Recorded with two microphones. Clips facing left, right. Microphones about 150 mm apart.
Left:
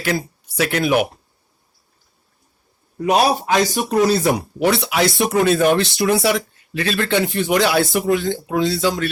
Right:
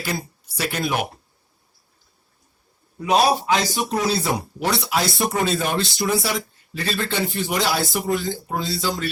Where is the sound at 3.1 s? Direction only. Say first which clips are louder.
Left 2 dB; 60° left (ahead or behind).